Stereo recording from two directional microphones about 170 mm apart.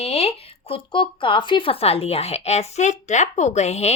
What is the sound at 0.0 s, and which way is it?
Speech, 40° left (ahead or behind).